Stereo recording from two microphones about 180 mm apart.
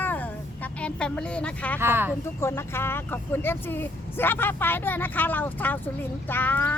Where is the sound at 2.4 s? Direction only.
15° left (ahead or behind).